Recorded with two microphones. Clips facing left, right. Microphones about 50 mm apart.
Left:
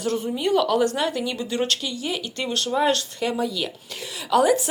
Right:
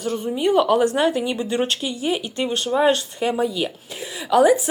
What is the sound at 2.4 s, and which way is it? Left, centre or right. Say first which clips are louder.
Speech: right 3 dB; centre.